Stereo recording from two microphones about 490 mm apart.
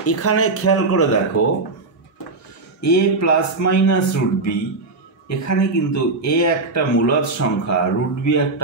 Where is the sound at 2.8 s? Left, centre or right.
Left.